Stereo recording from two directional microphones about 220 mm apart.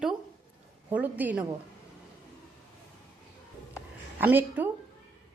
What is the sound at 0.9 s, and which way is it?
Speech, 5° right (ahead or behind).